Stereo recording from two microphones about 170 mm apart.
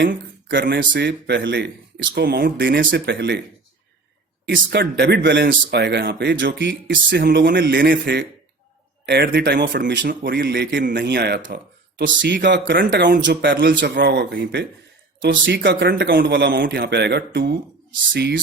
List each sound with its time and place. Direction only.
0.0 s speech: 60° right (ahead or behind); by 1.7 s 85° right
2.1 s speech: 70° right (ahead or behind)
4.4 s speech: 80° right
10.1 s speech: 60° right (ahead or behind); by 10.8 s 80° right
10.8 s speech: 65° right (ahead or behind)
12.2 s speech: 85° right